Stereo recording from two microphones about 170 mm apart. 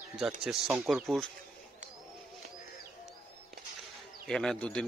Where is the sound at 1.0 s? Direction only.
Centre (ahead or behind).